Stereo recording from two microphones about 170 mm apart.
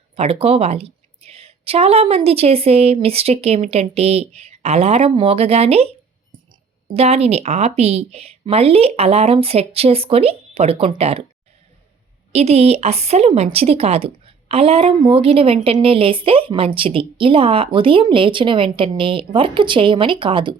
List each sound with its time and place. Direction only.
0.2 s speech: 35° right (ahead or behind)
12.3 s speech: 40° right (ahead or behind)